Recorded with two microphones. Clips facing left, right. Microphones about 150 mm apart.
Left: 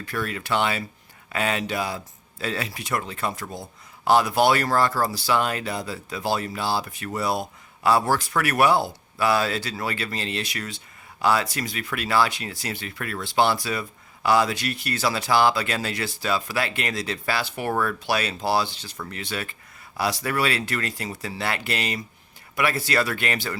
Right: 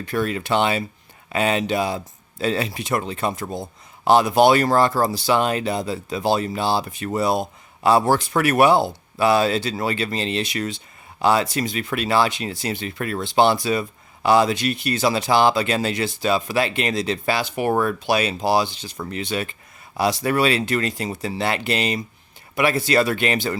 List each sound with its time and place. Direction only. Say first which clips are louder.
0.0 s speech: right 6 dB; 25° right (ahead or behind)